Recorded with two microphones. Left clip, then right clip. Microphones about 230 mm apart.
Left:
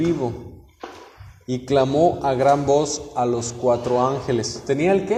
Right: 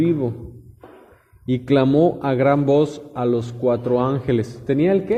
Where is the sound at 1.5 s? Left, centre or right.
Right.